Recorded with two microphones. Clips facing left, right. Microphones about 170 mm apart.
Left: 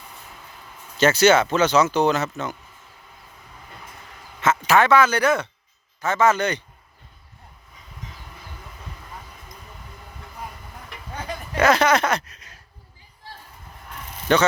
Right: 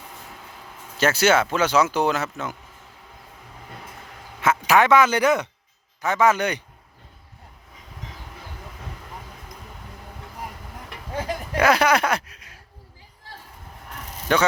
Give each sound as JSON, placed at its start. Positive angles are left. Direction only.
{"t": 0.9, "sound": "speech", "side_deg": -5}
{"t": 4.4, "sound": "speech", "side_deg": -10}
{"t": 11.5, "sound": "speech", "side_deg": -10}
{"t": 14.3, "sound": "speech", "side_deg": -5}